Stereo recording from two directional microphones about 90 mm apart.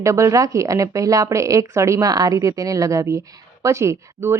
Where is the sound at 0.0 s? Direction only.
35° right (ahead or behind).